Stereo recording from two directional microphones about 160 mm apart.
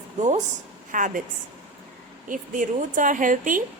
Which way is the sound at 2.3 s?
55° right (ahead or behind).